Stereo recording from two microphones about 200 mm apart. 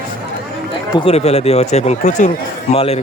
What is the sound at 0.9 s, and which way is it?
Speech, 25° left (ahead or behind).